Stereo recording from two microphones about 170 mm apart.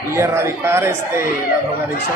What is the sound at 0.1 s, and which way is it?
Speech, 15° right (ahead or behind).